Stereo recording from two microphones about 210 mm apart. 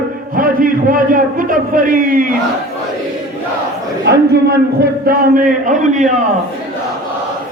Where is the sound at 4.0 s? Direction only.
50° right (ahead or behind); by 6.2 s 35° right (ahead or behind).